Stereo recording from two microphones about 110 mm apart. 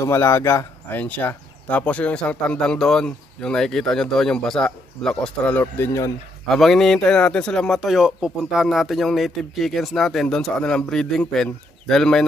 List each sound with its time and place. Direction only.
0.0 s speech: 25° left (ahead or behind)
1.0 s speech: 15° left (ahead or behind)
6.5 s speech: 5° left (ahead or behind)